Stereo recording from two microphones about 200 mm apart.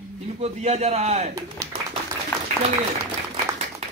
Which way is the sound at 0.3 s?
35° right (ahead or behind).